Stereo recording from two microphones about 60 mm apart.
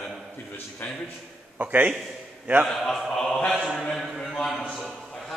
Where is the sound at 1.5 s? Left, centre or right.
Right.